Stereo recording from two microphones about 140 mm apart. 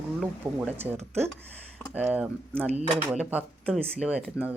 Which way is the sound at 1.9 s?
10° right (ahead or behind).